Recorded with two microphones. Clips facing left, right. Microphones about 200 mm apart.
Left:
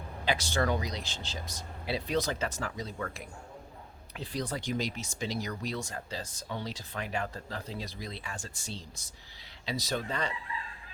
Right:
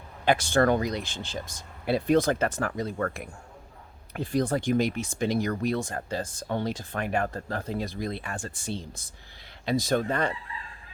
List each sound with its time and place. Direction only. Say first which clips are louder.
0.3 s speech: right 8 dB; 50° right (ahead or behind)